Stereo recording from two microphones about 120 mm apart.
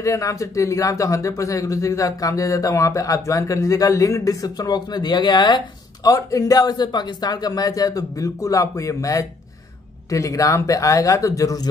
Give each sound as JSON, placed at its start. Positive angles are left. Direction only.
{"t": 0.0, "sound": "speech", "side_deg": 25}